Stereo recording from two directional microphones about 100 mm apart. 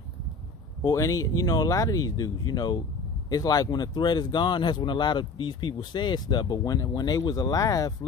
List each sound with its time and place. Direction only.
0.8 s speech: 35° left (ahead or behind)